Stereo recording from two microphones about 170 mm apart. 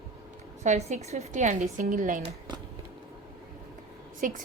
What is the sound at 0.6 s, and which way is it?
A woman's voice, 40° right (ahead or behind).